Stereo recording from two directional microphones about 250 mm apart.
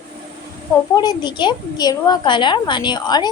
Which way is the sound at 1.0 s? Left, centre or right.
Centre.